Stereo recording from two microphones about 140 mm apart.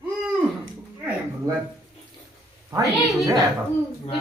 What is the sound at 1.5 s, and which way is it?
Speech, 25° right (ahead or behind).